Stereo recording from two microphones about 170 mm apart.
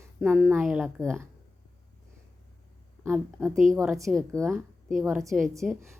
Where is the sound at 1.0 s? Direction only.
15° right (ahead or behind).